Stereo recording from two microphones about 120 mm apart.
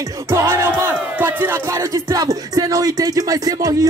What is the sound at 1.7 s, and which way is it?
Music, 30° right (ahead or behind).